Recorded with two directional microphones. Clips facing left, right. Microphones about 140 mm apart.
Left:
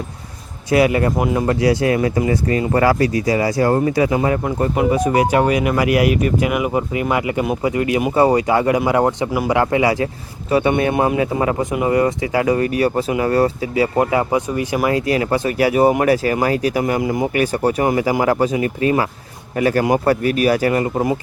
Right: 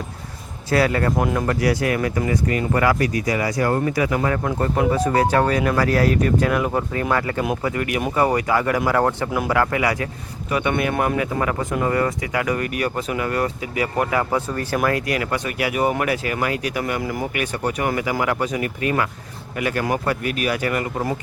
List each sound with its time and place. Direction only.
0.7 s speech: 15° left (ahead or behind)
1.1 s speech: 5° left (ahead or behind)
1.5 s speech: 25° left (ahead or behind)
4.4 s speech: 10° left (ahead or behind)
14.8 s speech: 25° left (ahead or behind)
17.0 s speech: 20° left (ahead or behind)
17.3 s speech: 35° left (ahead or behind)